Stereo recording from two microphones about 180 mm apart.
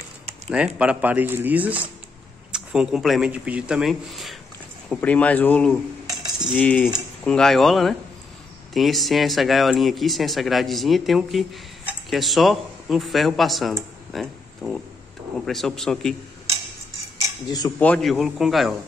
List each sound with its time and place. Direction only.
0.5 s speech: 5° right (ahead or behind)
6.0 s cutlery: 20° right (ahead or behind)
6.5 s speech: 10° left (ahead or behind)
17.5 s speech: 20° left (ahead or behind)
17.7 s speech: 5° left (ahead or behind)